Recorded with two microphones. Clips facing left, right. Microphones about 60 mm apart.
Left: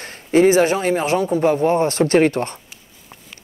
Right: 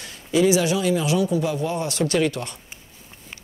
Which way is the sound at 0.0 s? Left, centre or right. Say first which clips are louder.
Left 5 dB; left.